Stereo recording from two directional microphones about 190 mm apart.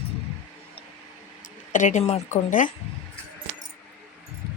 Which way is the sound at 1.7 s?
40° left (ahead or behind).